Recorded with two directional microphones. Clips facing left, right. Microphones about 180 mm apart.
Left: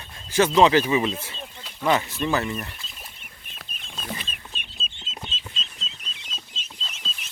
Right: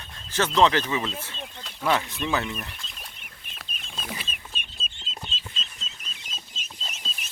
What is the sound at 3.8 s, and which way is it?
Chicken, centre (ahead or behind).